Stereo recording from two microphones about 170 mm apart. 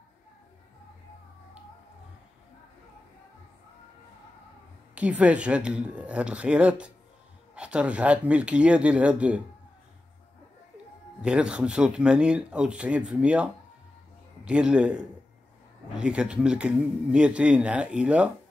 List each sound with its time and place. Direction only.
4.9 s speech: 5° right (ahead or behind)
11.1 s speech: 5° right (ahead or behind)